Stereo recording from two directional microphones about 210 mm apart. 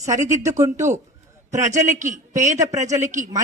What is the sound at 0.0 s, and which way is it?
Speech, 15° right (ahead or behind).